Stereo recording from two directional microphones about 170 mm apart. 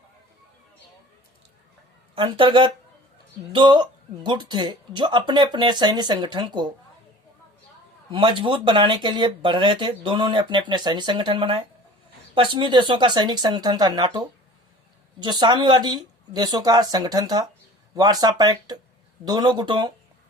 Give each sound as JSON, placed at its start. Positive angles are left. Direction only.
{"t": 2.4, "sound": "speech", "side_deg": -25}
{"t": 8.1, "sound": "speech", "side_deg": -30}